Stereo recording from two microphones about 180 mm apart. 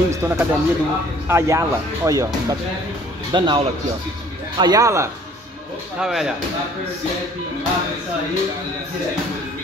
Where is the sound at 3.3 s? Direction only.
25° right (ahead or behind).